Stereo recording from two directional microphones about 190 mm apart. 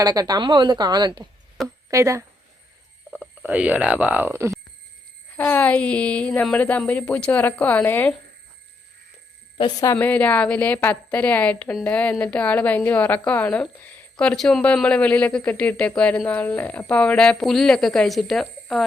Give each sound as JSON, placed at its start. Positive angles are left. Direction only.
{"t": 0.0, "sound": "a woman's voice", "side_deg": -20}
{"t": 5.4, "sound": "a woman's voice", "side_deg": 10}
{"t": 9.6, "sound": "a woman's voice", "side_deg": 20}